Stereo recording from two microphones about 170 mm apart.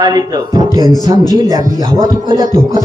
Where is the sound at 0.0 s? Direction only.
25° right (ahead or behind).